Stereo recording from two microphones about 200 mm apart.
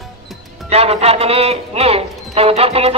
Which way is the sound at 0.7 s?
30° right (ahead or behind).